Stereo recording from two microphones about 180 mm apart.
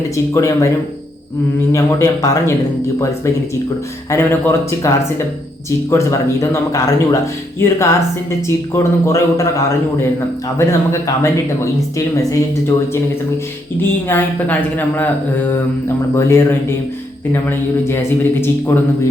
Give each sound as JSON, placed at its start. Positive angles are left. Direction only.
{"t": 0.3, "sound": "speech", "side_deg": 15}
{"t": 1.7, "sound": "speech", "side_deg": 15}
{"t": 4.1, "sound": "speech", "side_deg": 10}
{"t": 5.9, "sound": "speech", "side_deg": 15}
{"t": 14.1, "sound": "speech", "side_deg": 10}